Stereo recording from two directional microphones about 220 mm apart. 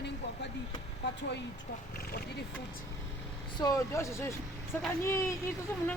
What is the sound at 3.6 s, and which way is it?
Speech, 15° left (ahead or behind).